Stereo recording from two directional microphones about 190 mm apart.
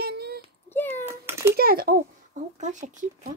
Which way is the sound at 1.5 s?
50° right (ahead or behind).